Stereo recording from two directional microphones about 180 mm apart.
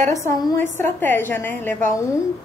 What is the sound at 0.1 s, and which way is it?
A woman's voice, 15° left (ahead or behind).